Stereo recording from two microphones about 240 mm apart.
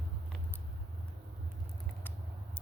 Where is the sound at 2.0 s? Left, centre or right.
Centre.